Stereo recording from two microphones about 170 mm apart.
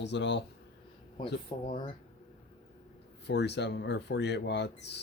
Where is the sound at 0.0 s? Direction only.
90° left.